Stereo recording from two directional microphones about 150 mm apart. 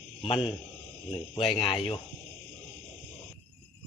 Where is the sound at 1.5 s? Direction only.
40° left (ahead or behind).